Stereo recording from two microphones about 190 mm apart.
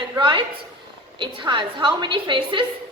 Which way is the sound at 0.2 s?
25° right (ahead or behind).